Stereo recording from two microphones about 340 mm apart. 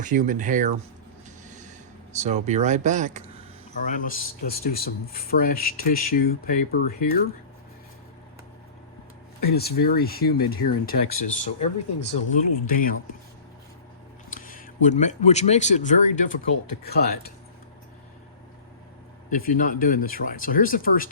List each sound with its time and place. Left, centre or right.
0.0 s speech: right
1.5 s a sound: right
2.1 s speech: centre
3.8 s speech: left
9.4 s speech: left
14.3 s speech: left
19.3 s speech: left